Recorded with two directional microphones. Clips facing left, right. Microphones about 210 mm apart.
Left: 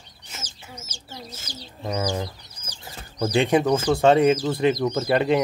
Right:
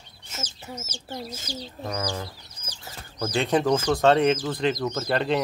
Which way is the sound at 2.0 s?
20° left (ahead or behind).